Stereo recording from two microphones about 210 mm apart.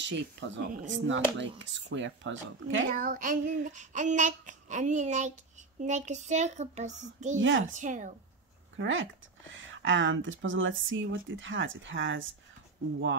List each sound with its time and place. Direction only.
0.0 s a woman's voice: 55° right (ahead or behind)
2.9 s child singing: 40° right (ahead or behind)
7.3 s a woman's voice: 65° right (ahead or behind)
7.6 s child singing: 35° right (ahead or behind)
8.7 s a woman's voice: 65° right (ahead or behind)